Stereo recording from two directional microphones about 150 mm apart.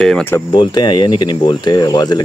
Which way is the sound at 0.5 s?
30° left (ahead or behind).